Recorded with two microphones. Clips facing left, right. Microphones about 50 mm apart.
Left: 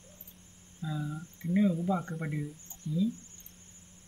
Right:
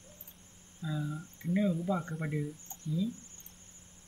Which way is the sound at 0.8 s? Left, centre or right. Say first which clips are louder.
Even; left.